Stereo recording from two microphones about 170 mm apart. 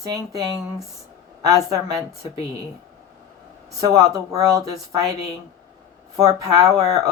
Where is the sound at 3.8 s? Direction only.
20° right (ahead or behind).